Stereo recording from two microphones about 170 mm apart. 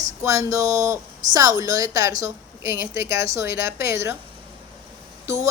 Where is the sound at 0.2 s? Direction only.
20° right (ahead or behind).